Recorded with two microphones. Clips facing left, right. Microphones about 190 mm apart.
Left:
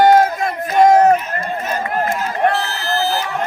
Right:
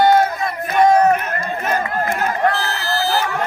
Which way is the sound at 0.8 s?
40° left (ahead or behind).